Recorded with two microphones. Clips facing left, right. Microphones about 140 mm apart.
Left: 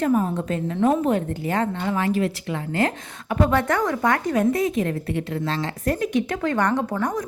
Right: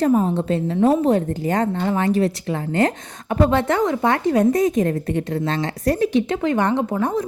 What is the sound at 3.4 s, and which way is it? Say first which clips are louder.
A woman's voice: right 3 dB; 25° right (ahead or behind).